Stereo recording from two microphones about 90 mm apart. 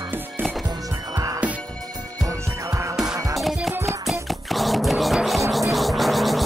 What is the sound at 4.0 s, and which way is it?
Music, centre (ahead or behind).